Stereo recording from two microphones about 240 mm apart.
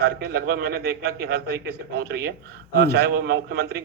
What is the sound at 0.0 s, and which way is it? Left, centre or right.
A man's voice, right.